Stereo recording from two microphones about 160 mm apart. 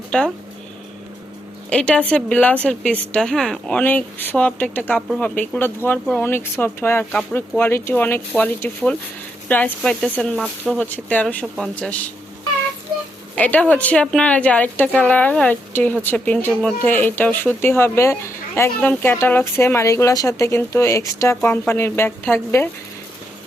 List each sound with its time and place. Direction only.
0.1 s speech: 5° left (ahead or behind)
1.7 s speech: 5° left (ahead or behind)
13.3 s speech: 10° left (ahead or behind)